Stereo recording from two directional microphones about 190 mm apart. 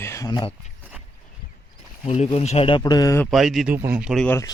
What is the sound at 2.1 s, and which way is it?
Speech, 35° left (ahead or behind).